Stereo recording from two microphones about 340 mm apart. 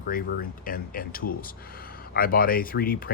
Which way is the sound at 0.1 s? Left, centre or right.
Left.